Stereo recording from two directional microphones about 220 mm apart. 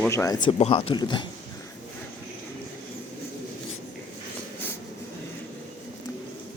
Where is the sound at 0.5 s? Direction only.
25° left (ahead or behind).